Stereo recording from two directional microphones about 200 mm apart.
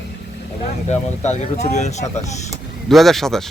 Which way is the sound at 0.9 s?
35° left (ahead or behind).